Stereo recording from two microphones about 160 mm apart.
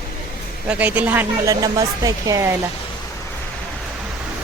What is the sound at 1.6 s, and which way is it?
Speech, 25° right (ahead or behind).